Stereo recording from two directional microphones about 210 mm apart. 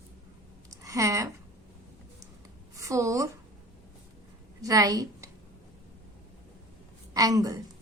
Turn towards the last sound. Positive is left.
turn(degrees=-15)  # may be behind; listen again after turning